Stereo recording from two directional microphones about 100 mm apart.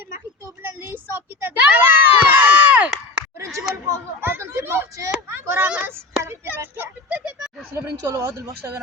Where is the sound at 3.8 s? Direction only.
25° right (ahead or behind).